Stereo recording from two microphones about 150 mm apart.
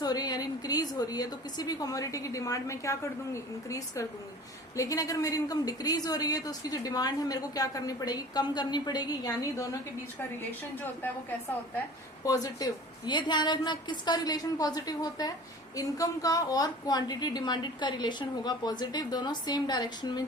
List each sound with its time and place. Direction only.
0.0 s a woman's voice: 25° left (ahead or behind)
12.2 s a woman's voice: 25° left (ahead or behind)